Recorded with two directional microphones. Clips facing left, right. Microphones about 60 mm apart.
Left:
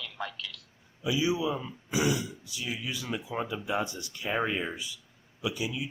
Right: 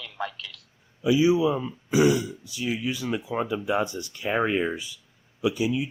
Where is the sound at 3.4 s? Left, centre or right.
Right.